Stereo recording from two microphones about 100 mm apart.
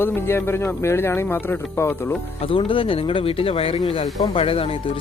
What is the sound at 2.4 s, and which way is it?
Speech, 60° left (ahead or behind).